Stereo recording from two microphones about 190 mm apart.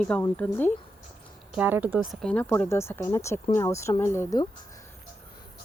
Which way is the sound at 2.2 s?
10° left (ahead or behind).